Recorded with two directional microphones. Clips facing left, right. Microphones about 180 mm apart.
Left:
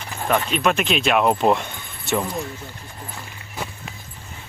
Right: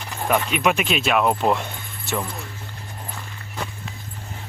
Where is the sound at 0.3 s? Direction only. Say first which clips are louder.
Even; 10° right (ahead or behind).